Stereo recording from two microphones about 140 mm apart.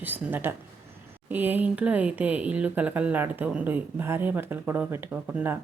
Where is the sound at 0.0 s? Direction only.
15° right (ahead or behind).